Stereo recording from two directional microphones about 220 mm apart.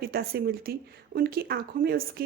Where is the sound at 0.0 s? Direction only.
45° right (ahead or behind).